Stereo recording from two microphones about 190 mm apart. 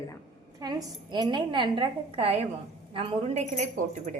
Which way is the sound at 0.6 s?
20° right (ahead or behind).